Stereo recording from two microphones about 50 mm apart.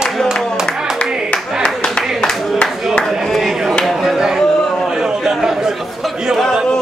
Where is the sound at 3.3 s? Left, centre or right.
Centre.